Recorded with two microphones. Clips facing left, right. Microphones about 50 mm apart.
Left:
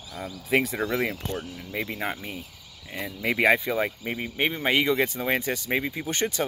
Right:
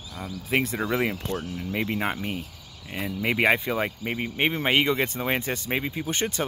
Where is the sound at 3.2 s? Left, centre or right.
Centre.